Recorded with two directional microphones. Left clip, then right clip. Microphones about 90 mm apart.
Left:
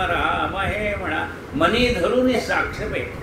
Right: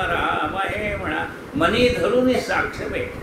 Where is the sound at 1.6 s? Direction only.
15° right (ahead or behind).